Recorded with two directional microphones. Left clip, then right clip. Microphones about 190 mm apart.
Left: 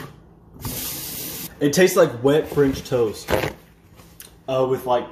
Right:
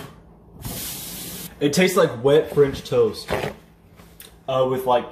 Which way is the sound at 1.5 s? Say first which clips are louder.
Left 2 dB; 35° left (ahead or behind).